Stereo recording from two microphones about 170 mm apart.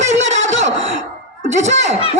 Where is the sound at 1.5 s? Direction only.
45° right (ahead or behind).